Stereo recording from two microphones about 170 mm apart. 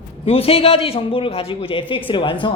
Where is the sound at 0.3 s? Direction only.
35° left (ahead or behind).